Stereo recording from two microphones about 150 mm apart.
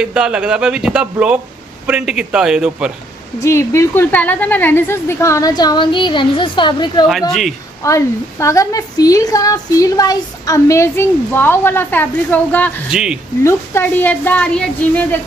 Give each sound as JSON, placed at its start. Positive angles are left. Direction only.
{"t": 0.0, "sound": "speech", "side_deg": -5}
{"t": 3.4, "sound": "a woman's voice", "side_deg": 20}
{"t": 7.8, "sound": "a woman's voice", "side_deg": 20}
{"t": 12.9, "sound": "speech", "side_deg": -5}
{"t": 13.4, "sound": "a woman's voice", "side_deg": 15}